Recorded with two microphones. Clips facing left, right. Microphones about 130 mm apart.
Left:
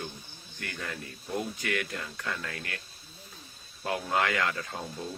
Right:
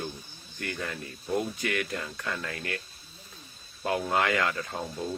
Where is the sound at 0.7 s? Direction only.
15° right (ahead or behind).